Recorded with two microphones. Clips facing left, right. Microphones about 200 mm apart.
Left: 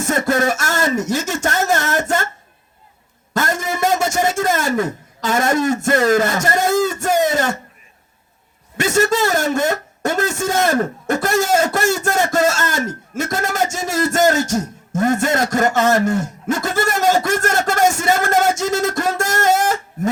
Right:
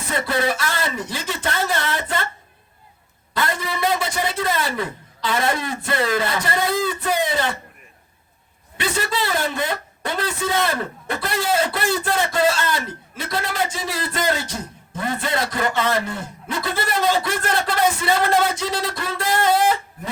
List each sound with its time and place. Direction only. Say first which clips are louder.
0.0 s a man's voice: left 5 dB; 45° left (ahead or behind)
3.3 s a man's voice: left 4 dB; 45° left (ahead or behind)
8.8 s a man's voice: left 8 dB; 45° left (ahead or behind)